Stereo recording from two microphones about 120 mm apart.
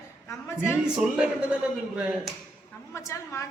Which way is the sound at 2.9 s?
25° left (ahead or behind).